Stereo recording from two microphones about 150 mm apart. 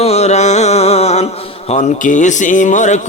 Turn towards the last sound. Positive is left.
turn(degrees=55)  # may be behind; listen again after turning